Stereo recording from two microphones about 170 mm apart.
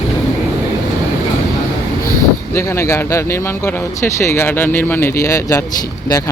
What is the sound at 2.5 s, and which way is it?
Speech, 15° left (ahead or behind).